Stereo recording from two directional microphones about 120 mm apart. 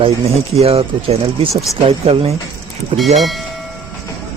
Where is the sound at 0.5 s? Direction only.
55° right (ahead or behind).